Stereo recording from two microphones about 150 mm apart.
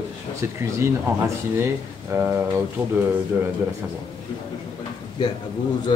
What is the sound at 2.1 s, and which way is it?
Speech, 15° right (ahead or behind).